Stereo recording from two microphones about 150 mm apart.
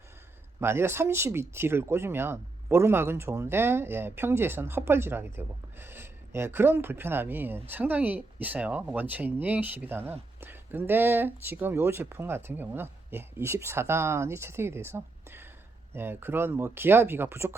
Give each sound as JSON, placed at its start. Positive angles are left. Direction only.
{"t": 0.6, "sound": "speech", "side_deg": -15}